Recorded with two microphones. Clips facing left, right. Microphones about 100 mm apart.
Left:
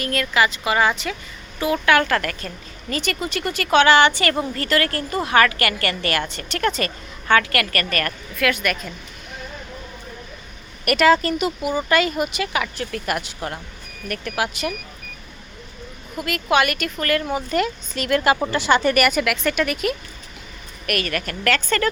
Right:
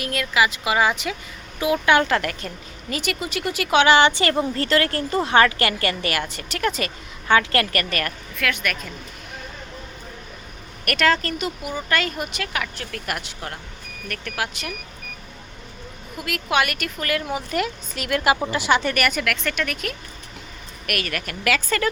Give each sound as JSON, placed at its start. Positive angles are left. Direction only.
{"t": 0.0, "sound": "a woman's voice", "side_deg": -5}
{"t": 2.9, "sound": "a woman's voice", "side_deg": -10}
{"t": 7.5, "sound": "a woman's voice", "side_deg": -25}
{"t": 8.4, "sound": "speech", "side_deg": 0}
{"t": 10.8, "sound": "a woman's voice", "side_deg": 5}
{"t": 16.1, "sound": "a woman's voice", "side_deg": 0}
{"t": 20.8, "sound": "a woman's voice", "side_deg": -5}